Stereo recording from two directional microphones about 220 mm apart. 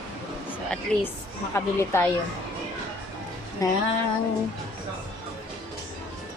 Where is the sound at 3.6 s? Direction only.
15° left (ahead or behind).